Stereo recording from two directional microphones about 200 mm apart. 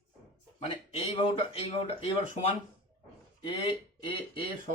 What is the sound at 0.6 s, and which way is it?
Speech, 25° left (ahead or behind).